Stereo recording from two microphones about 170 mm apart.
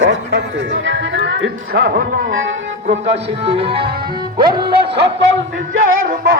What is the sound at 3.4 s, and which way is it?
Music, 35° right (ahead or behind).